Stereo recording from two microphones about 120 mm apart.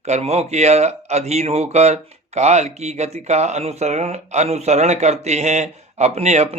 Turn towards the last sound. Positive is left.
turn(degrees=-65)  # may be behind; listen again after turning